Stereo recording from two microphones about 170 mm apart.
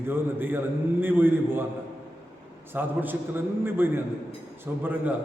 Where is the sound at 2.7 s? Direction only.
10° right (ahead or behind).